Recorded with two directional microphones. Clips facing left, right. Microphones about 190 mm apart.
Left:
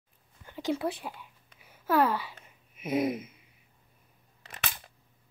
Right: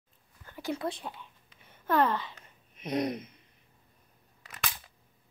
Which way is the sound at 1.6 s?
5° left (ahead or behind).